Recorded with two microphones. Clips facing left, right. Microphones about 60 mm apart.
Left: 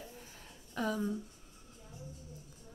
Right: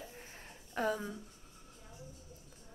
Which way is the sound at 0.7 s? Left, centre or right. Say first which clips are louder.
Even; right.